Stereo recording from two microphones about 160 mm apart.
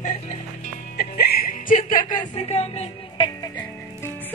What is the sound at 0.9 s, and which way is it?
Music, 80° left.